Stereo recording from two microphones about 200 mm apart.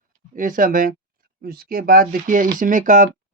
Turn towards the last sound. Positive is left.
turn(degrees=-40)  # may be behind; listen again after turning